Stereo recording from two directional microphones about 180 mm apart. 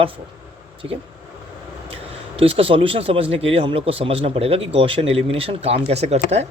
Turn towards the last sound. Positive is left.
turn(degrees=-35)  # may be behind; listen again after turning